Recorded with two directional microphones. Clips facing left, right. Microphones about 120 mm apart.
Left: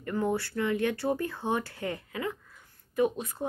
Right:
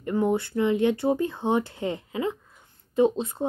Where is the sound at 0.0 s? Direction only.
20° right (ahead or behind).